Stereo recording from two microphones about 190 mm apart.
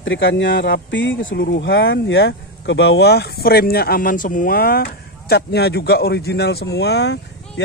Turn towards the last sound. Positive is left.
turn(degrees=65)  # may be behind; listen again after turning